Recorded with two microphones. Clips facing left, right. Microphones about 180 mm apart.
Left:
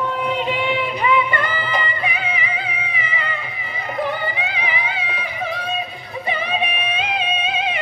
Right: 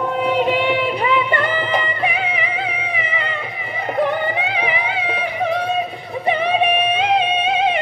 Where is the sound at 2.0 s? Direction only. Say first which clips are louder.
Right 4 dB; 60° right (ahead or behind).